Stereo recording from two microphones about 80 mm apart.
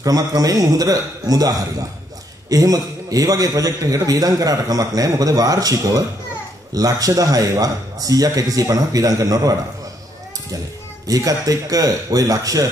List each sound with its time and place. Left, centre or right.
0.0 s a man's voice: right
11.1 s a man's voice: right